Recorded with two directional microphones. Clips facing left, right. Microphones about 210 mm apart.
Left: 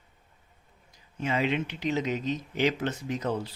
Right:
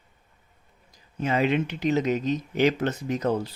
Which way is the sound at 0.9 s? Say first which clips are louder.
Right 4 dB; 40° right (ahead or behind).